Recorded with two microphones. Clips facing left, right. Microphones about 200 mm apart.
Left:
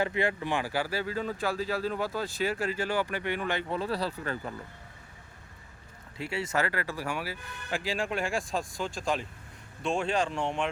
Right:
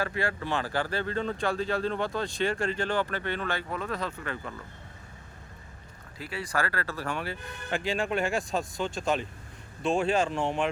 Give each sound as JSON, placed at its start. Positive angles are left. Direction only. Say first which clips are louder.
{"t": 0.0, "sound": "speech", "louder": "left 2 dB", "side_deg": 20}
{"t": 3.7, "sound": "speech", "louder": "left 2 dB", "side_deg": 30}
{"t": 6.1, "sound": "speech", "louder": "left 2 dB", "side_deg": 25}